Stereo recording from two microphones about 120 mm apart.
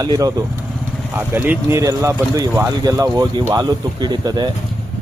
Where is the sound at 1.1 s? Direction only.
15° right (ahead or behind).